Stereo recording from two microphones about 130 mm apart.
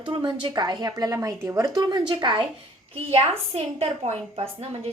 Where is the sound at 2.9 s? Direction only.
50° right (ahead or behind).